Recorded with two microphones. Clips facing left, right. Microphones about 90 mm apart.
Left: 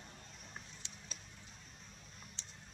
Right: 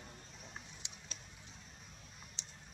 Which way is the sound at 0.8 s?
15° right (ahead or behind).